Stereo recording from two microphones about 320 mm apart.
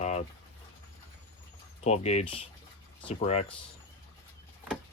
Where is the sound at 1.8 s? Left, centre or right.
Centre.